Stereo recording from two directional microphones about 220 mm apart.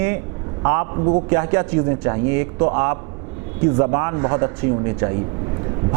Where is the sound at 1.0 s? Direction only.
30° right (ahead or behind).